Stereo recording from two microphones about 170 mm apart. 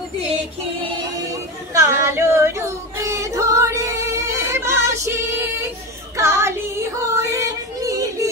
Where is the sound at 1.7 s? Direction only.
15° right (ahead or behind).